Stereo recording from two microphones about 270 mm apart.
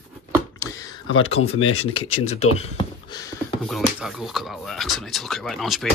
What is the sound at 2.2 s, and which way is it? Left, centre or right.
Speech, left.